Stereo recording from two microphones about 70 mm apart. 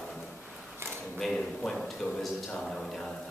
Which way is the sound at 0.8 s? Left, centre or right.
Right.